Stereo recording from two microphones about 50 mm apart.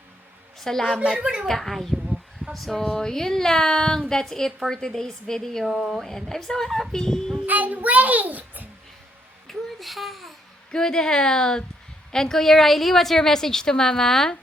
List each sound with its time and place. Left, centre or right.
0.6 s a woman's voice: centre
1.0 s speech: centre
1.5 s a woman's voice: centre
2.8 s a woman's voice: centre
5.6 s a woman's voice: centre
7.4 s a child's voice: right
9.5 s speech: centre
10.7 s a woman's voice: centre